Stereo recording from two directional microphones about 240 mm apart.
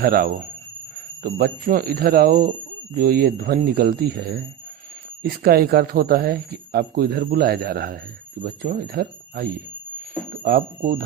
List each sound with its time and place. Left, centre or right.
0.0 s speech: right